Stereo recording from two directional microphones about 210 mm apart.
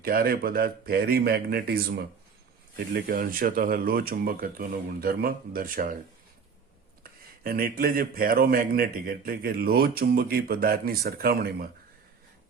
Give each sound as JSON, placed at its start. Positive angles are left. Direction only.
{"t": 0.0, "sound": "speech", "side_deg": -45}
{"t": 7.0, "sound": "speech", "side_deg": -45}